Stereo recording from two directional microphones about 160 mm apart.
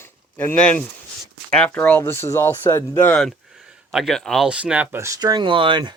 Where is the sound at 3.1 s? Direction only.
Centre (ahead or behind); by 5.9 s 30° right (ahead or behind).